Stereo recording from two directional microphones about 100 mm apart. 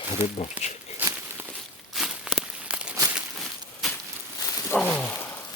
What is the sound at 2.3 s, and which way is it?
Crumpling, 10° right (ahead or behind).